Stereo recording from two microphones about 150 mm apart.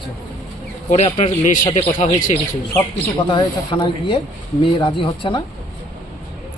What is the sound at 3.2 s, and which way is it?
Speech, 30° left (ahead or behind).